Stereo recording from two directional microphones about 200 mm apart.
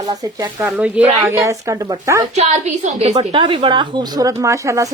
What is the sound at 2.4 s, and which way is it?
Speech, 35° right (ahead or behind).